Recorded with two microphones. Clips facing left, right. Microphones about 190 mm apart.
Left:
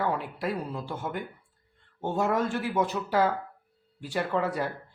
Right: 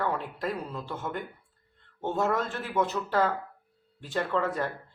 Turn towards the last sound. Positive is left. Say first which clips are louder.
# even
turn(degrees=10)  # may be behind; listen again after turning